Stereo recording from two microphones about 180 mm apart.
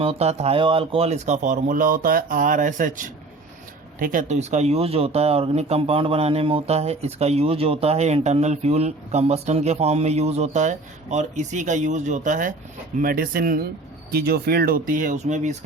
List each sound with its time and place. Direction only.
0.0 s speech: 35° right (ahead or behind)